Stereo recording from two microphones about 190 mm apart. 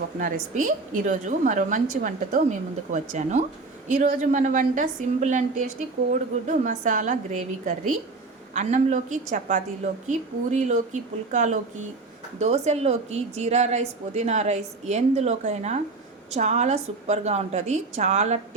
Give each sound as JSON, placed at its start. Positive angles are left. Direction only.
{"t": 0.2, "sound": "a woman's voice", "side_deg": -45}
{"t": 6.7, "sound": "a woman's voice", "side_deg": -40}